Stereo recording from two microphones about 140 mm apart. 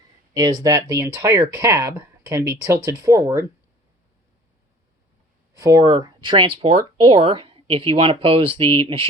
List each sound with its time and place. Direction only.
0.3 s speech: 30° right (ahead or behind)
5.5 s speech: 25° right (ahead or behind); by 9.0 s 40° right (ahead or behind)